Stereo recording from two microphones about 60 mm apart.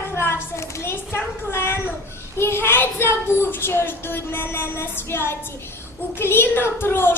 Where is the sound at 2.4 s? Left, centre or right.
Left.